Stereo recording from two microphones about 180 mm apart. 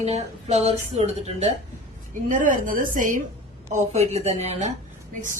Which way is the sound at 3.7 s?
40° right (ahead or behind).